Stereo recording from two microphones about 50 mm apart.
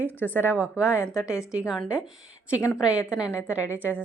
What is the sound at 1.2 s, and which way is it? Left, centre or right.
Speech, left.